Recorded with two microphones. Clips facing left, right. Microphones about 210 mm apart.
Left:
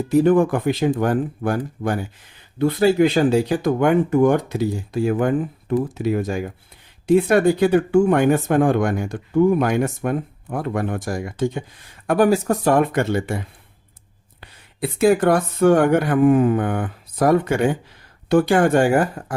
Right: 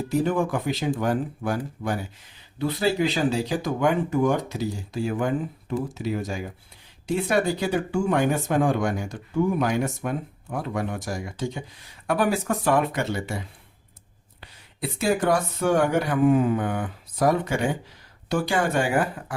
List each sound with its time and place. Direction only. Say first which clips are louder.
0.1 s speech: left 9 dB; 55° left (ahead or behind)
14.4 s speech: left 6 dB; 55° left (ahead or behind)